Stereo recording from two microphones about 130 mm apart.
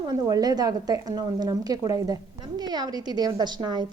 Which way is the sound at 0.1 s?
30° right (ahead or behind).